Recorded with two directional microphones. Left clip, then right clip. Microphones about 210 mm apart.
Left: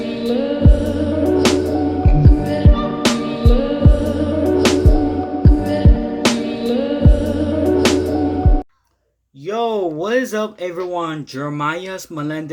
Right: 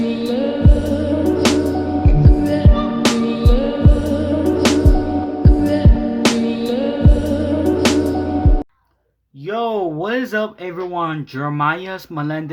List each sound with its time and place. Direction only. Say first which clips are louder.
0.3 s music: left 4 dB; centre (ahead or behind)
9.5 s a sound: left 1 dB; 20° right (ahead or behind)
10.9 s speech: right 1 dB; 20° right (ahead or behind)